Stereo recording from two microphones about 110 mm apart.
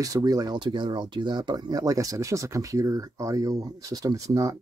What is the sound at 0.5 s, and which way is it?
Speech, 45° right (ahead or behind).